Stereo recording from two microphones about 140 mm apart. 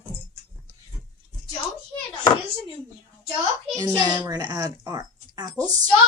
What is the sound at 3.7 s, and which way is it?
A child's voice, 25° right (ahead or behind).